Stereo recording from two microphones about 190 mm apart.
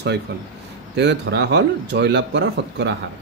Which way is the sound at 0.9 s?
65° right (ahead or behind).